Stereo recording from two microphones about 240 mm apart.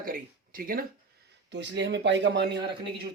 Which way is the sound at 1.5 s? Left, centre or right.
Right.